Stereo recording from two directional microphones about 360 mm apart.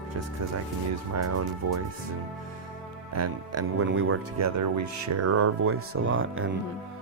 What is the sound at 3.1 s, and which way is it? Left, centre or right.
Speech, right.